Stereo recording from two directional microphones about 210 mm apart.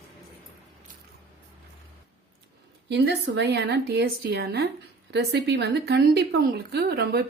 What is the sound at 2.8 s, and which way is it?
Speech, 55° right (ahead or behind).